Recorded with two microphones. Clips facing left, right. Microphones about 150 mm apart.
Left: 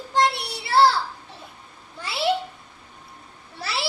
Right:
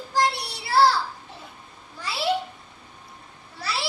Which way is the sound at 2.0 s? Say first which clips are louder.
Left 1 dB; 25° left (ahead or behind).